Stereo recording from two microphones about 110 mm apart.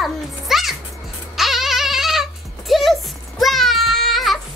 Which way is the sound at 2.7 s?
Centre (ahead or behind).